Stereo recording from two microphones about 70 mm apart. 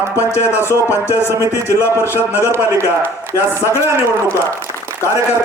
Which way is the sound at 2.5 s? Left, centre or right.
Right.